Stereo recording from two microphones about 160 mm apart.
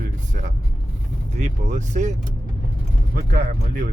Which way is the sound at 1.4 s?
50° right (ahead or behind).